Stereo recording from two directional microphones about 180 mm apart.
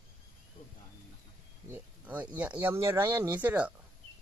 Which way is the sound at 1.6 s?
10° right (ahead or behind).